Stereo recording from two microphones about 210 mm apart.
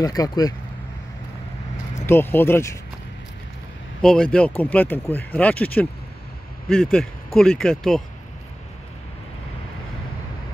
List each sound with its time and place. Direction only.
0.0 s speech: 15° left (ahead or behind)
2.0 s speech: 10° left (ahead or behind)
4.0 s speech: 5° left (ahead or behind)